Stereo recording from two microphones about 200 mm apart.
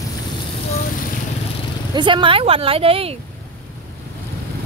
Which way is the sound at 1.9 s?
25° right (ahead or behind).